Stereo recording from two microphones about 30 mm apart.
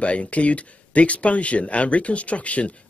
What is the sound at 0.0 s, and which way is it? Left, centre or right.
Speech, left.